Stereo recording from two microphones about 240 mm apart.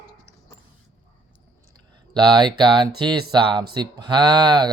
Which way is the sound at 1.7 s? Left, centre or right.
Centre.